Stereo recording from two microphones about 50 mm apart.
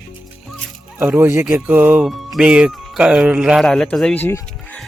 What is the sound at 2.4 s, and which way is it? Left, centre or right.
Speech, right.